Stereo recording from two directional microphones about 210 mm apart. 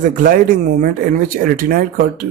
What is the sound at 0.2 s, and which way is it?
Speech, 40° right (ahead or behind).